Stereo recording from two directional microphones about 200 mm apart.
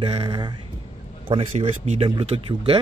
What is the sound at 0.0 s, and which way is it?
A man's voice, 25° right (ahead or behind).